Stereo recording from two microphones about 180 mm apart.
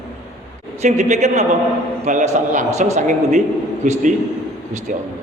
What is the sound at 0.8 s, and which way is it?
A man's voice, 40° right (ahead or behind).